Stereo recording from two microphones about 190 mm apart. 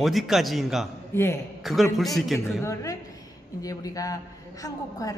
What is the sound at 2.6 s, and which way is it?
A woman's voice, 15° left (ahead or behind).